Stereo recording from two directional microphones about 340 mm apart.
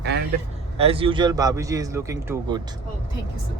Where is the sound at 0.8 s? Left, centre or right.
Centre.